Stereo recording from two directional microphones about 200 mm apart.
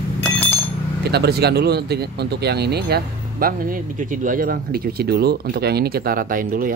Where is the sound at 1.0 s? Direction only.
55° right (ahead or behind).